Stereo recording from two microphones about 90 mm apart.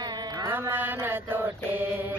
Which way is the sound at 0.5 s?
25° right (ahead or behind).